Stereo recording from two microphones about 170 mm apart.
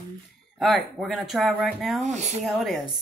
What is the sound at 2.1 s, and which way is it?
Speech, 40° right (ahead or behind).